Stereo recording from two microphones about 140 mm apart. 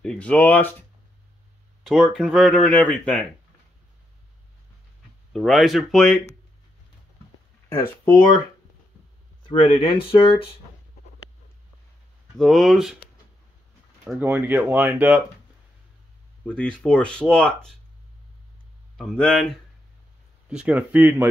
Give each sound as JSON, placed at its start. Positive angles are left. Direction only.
{"t": 0.0, "sound": "speech", "side_deg": 10}
{"t": 5.3, "sound": "speech", "side_deg": 0}
{"t": 9.4, "sound": "speech", "side_deg": 40}
{"t": 12.4, "sound": "speech", "side_deg": 0}
{"t": 14.0, "sound": "speech", "side_deg": -10}
{"t": 16.4, "sound": "speech", "side_deg": 10}
{"t": 18.9, "sound": "speech", "side_deg": 5}
{"t": 20.4, "sound": "speech", "side_deg": -10}